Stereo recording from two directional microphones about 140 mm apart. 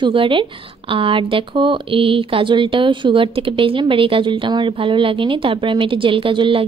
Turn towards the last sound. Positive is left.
turn(degrees=-35)  # may be behind; listen again after turning